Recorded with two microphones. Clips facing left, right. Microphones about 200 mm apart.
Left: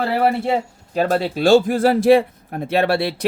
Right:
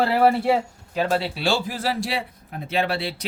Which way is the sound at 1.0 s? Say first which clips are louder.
Left 5 dB; 45° left (ahead or behind).